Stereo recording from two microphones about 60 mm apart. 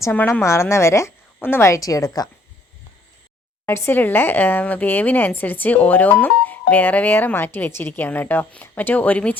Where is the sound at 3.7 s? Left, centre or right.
Left.